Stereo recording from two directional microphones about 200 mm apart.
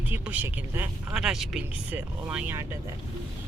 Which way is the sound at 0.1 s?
10° right (ahead or behind).